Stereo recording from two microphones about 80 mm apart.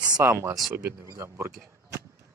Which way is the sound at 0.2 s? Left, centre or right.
Right.